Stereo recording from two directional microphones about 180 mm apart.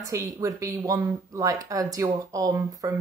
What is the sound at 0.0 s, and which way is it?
Speech, 15° right (ahead or behind).